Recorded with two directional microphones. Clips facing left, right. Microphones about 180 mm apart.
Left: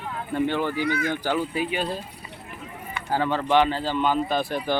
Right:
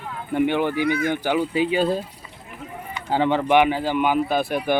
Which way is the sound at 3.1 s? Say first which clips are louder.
Right 3 dB; 20° right (ahead or behind).